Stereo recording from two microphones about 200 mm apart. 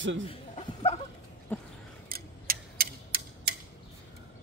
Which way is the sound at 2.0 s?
45° right (ahead or behind).